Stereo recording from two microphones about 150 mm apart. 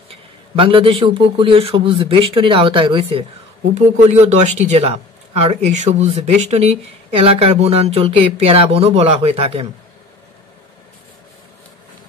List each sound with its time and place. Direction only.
0.1 s a man's voice: 35° right (ahead or behind)
3.7 s speech: 50° right (ahead or behind)